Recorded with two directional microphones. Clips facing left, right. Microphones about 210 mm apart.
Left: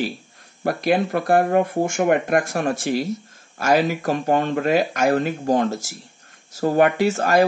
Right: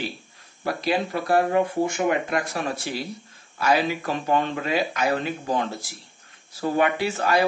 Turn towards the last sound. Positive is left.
turn(degrees=45)  # may be behind; listen again after turning